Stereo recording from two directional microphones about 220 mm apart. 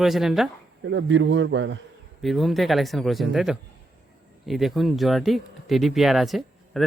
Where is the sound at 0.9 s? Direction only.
55° right (ahead or behind).